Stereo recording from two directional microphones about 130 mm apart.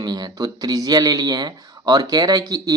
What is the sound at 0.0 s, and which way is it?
Speech, 30° right (ahead or behind).